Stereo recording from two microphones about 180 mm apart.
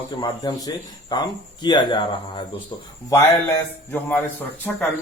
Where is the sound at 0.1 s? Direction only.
20° left (ahead or behind).